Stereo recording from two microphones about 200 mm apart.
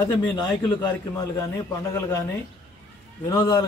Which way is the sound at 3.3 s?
20° left (ahead or behind).